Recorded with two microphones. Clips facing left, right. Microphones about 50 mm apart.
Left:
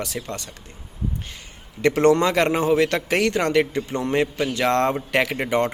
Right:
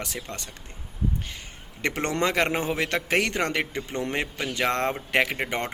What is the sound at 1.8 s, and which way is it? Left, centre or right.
Speech, right.